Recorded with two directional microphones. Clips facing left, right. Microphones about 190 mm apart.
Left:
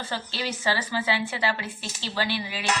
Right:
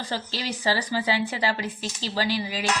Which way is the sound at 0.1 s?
35° right (ahead or behind).